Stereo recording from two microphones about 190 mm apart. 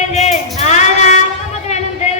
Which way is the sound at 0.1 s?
35° left (ahead or behind).